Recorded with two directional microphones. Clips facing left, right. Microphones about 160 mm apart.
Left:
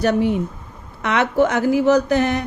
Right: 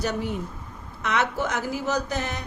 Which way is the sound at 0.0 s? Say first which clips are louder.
Left 10 dB; 65° left (ahead or behind).